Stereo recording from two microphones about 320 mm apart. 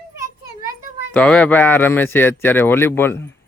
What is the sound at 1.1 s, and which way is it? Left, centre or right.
Speech, centre.